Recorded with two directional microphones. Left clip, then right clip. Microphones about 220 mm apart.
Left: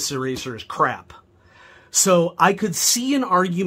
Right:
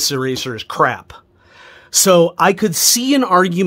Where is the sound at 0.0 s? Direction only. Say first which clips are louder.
Right 7 dB; 50° right (ahead or behind).